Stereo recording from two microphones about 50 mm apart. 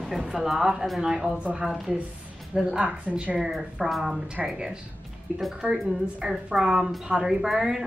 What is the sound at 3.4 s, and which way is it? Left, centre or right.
Speech, centre.